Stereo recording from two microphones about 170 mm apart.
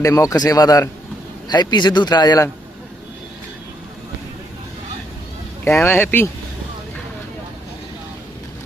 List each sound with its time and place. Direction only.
0.0 s a man's voice: 20° left (ahead or behind)
5.8 s speech: 10° left (ahead or behind)